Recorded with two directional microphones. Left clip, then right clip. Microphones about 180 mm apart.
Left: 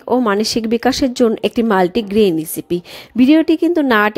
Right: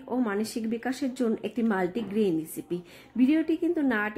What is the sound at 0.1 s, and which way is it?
Speech, 45° left (ahead or behind).